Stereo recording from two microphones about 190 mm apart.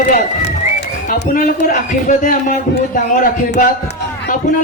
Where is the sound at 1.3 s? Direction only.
45° left (ahead or behind).